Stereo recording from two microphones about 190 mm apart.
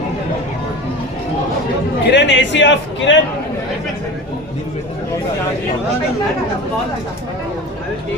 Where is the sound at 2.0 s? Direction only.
65° left (ahead or behind).